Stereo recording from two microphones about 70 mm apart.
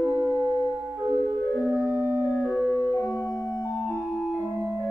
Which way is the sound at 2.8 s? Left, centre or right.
Left.